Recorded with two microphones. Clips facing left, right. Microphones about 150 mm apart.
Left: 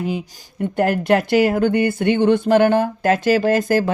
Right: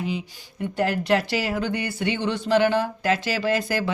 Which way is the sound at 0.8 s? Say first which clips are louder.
Left 5 dB; 50° left (ahead or behind).